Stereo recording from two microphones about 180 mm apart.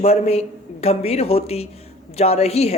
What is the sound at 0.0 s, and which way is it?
Speech, 35° left (ahead or behind).